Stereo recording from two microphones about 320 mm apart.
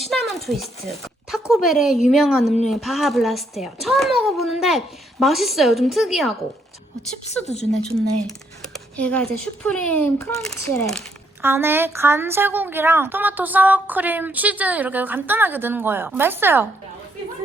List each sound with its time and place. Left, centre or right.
0.0 s a sound: centre
0.9 s a child's voice: centre
7.3 s a woman's voice: centre
7.6 s a child's voice: centre
8.7 s a sound: centre
9.6 s a child's voice: centre
11.4 s a woman's voice: centre